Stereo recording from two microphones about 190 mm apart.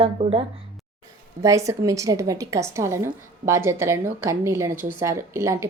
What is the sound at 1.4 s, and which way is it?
A woman's voice, 15° right (ahead or behind).